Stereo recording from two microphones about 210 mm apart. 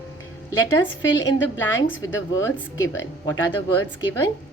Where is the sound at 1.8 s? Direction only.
70° left (ahead or behind).